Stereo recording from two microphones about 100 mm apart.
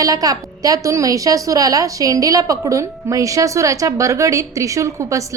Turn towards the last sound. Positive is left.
turn(degrees=-30)  # may be behind; listen again after turning